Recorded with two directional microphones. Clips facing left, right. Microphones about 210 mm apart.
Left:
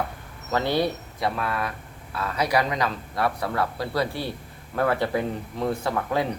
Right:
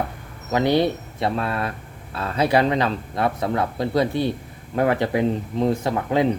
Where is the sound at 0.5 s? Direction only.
15° right (ahead or behind).